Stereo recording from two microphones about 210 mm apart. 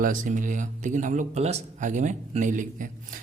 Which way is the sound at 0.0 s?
40° right (ahead or behind).